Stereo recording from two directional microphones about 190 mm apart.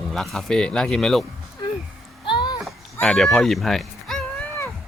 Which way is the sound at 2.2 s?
25° left (ahead or behind).